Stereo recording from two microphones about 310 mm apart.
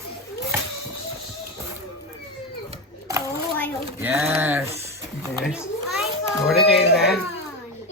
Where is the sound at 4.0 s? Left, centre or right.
Centre.